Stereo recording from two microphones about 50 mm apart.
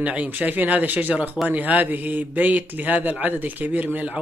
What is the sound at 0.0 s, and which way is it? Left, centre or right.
Speech, right.